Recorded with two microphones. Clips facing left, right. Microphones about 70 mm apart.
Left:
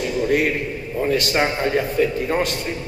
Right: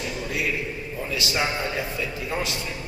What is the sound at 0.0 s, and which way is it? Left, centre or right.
A man's voice, left.